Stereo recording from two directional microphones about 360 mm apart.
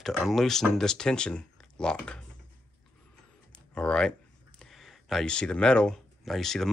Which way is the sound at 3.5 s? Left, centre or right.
Centre.